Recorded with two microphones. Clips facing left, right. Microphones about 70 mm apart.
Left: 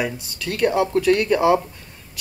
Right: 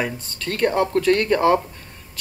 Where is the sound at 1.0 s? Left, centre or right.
Centre.